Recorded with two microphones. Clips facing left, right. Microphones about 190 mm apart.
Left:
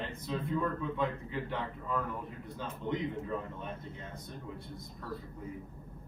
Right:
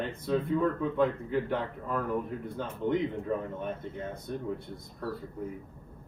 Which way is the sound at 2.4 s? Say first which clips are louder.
Right 7 dB; 55° right (ahead or behind).